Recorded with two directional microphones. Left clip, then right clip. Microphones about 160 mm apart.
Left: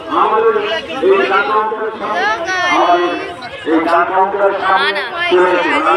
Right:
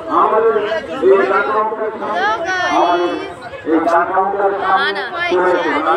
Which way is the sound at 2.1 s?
10° right (ahead or behind).